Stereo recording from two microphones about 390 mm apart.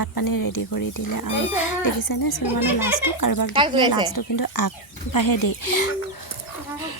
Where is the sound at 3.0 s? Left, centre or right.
Left.